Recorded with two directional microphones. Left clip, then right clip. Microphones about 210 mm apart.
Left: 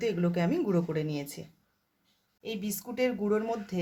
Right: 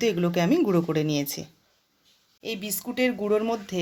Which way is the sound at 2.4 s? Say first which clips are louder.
Right 5 dB; 35° right (ahead or behind).